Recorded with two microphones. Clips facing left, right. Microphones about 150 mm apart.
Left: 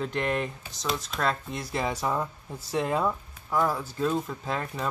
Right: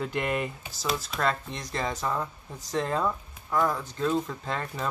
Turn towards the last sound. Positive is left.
turn(degrees=5)  # may be behind; listen again after turning